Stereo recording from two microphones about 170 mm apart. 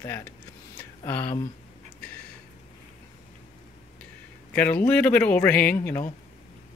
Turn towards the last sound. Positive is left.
turn(degrees=10)  # may be behind; listen again after turning